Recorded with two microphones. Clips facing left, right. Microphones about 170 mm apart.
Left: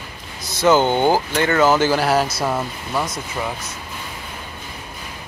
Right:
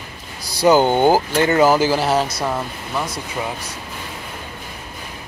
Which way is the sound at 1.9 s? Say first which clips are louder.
Even; centre (ahead or behind).